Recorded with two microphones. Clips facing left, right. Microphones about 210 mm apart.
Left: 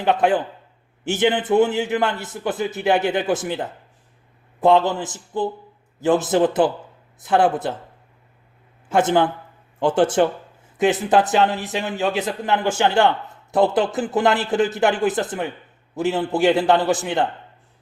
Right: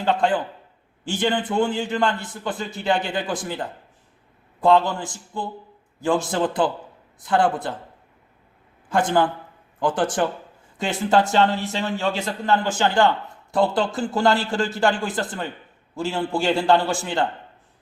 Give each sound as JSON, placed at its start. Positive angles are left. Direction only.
{"t": 0.0, "sound": "speech", "side_deg": 20}
{"t": 8.9, "sound": "speech", "side_deg": 20}